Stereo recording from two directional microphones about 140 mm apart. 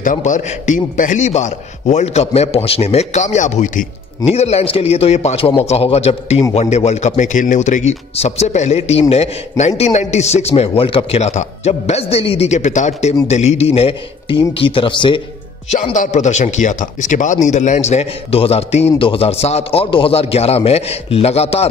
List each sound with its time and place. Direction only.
0.0 s a man's voice: 65° left (ahead or behind)
4.3 s a man's voice: 50° left (ahead or behind)
15.7 s a man's voice: 55° left (ahead or behind)